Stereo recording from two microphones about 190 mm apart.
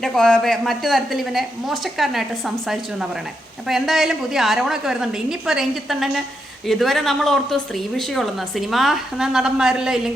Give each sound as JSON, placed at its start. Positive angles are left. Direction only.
{"t": 0.0, "sound": "a woman's voice", "side_deg": 5}